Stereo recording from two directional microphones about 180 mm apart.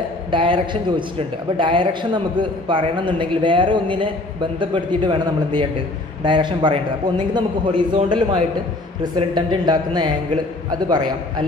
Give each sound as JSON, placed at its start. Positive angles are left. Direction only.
{"t": 0.3, "sound": "a man's voice", "side_deg": -25}